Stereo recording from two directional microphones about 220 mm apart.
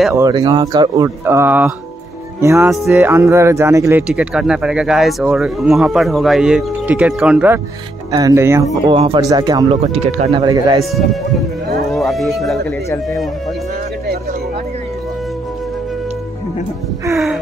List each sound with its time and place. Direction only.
0.1 s speech: 15° right (ahead or behind)
8.8 s speech: 25° right (ahead or behind)
11.9 s a sound: centre (ahead or behind)
17.1 s speech: centre (ahead or behind)